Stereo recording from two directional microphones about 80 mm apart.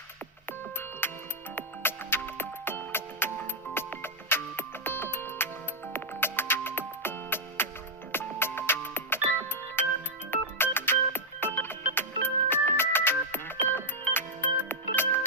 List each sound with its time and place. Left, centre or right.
1.0 s music: left